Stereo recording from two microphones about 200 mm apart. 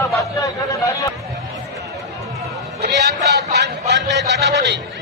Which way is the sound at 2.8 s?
55° right (ahead or behind).